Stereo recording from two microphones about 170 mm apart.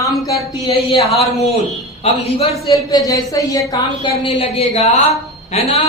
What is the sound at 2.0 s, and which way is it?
Speech, 35° left (ahead or behind).